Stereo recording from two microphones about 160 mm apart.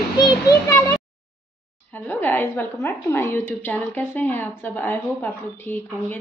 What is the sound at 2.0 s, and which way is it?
A woman's voice, 10° left (ahead or behind).